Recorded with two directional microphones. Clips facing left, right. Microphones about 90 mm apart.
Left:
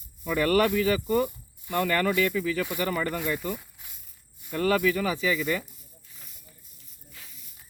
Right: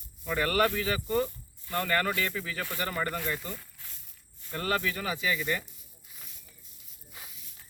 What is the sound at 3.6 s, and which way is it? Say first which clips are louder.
Insect: even; 15° left (ahead or behind).